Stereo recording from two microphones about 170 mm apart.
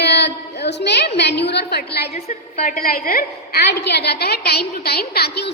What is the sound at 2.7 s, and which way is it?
A woman's voice, 55° left (ahead or behind).